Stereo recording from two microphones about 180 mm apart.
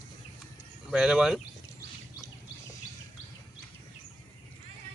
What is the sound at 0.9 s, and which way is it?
Speech, 5° right (ahead or behind).